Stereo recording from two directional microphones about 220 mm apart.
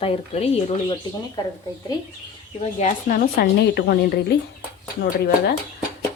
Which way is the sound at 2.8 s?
40° left (ahead or behind).